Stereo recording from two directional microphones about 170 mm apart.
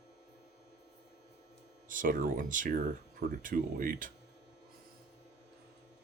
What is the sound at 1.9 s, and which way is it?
Speech, 50° right (ahead or behind).